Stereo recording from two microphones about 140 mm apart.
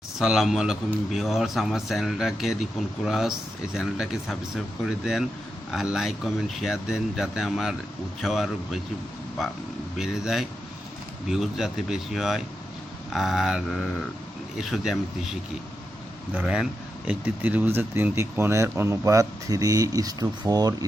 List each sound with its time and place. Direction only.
0.2 s a man's voice: centre (ahead or behind)
10.0 s a man's voice: 5° right (ahead or behind)
16.4 s a man's voice: 5° right (ahead or behind); by 20.7 s 30° right (ahead or behind)